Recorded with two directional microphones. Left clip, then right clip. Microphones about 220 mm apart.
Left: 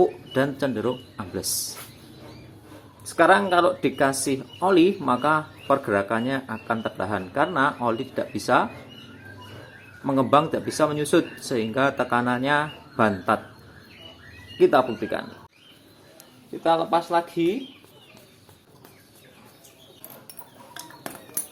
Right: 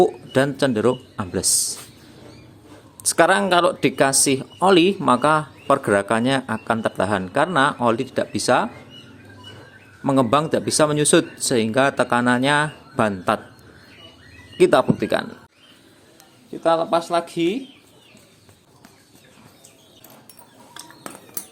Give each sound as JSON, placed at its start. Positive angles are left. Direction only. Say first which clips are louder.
{"t": 0.0, "sound": "speech", "louder": "right 4 dB", "side_deg": -40}
{"t": 3.0, "sound": "speech", "louder": "right 1 dB", "side_deg": -50}
{"t": 10.0, "sound": "speech", "louder": "right 2 dB", "side_deg": -40}
{"t": 14.6, "sound": "speech", "louder": "right 3 dB", "side_deg": -45}
{"t": 16.6, "sound": "speech", "louder": "right 3 dB", "side_deg": -40}
{"t": 20.8, "sound": "a sound", "louder": "right 1 dB", "side_deg": -5}